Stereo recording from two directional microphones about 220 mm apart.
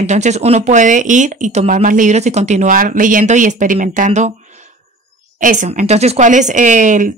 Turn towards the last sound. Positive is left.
turn(degrees=-35)  # may be behind; listen again after turning